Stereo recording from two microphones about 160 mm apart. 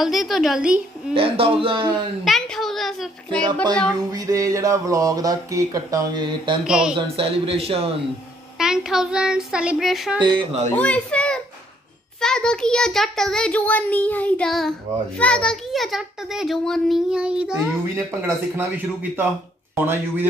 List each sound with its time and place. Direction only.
0.0 s a child's voice: centre (ahead or behind)
1.1 s a man's voice: 35° right (ahead or behind)
2.2 s a child's voice: centre (ahead or behind)
4.1 s speech: 20° right (ahead or behind)
6.6 s a child's voice: 5° right (ahead or behind)
7.0 s a man's voice: 35° right (ahead or behind)
8.5 s a child's voice: 5° right (ahead or behind)
10.2 s speech: 30° right (ahead or behind)
10.7 s a child's voice: 10° left (ahead or behind); by 20.2 s 15° right (ahead or behind)